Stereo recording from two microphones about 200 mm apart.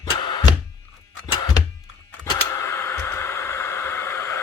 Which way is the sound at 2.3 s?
15° left (ahead or behind).